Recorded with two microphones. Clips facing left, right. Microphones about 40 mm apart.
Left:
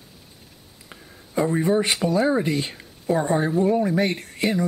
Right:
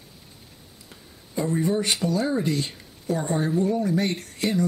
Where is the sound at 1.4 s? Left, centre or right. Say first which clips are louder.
Left 3 dB; left.